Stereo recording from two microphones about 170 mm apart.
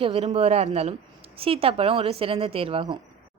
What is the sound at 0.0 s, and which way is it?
A woman's voice, 35° right (ahead or behind).